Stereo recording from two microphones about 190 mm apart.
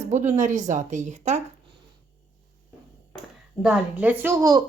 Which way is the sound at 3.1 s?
Centre (ahead or behind).